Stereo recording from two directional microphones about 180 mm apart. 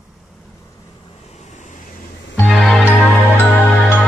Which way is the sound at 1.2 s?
40° left (ahead or behind).